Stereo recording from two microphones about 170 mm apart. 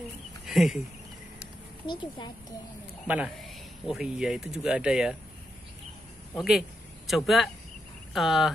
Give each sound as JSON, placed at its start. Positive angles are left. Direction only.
{"t": 0.5, "sound": "speech", "side_deg": 0}
{"t": 1.9, "sound": "speech", "side_deg": 25}
{"t": 3.1, "sound": "speech", "side_deg": -5}
{"t": 7.1, "sound": "speech", "side_deg": 0}